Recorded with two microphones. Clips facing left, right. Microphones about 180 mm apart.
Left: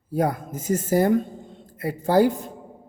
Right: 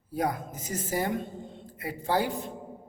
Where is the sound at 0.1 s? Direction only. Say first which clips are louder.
Left 6 dB; 45° left (ahead or behind).